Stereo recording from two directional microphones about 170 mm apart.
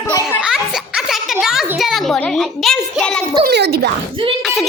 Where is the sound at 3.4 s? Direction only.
70° right (ahead or behind).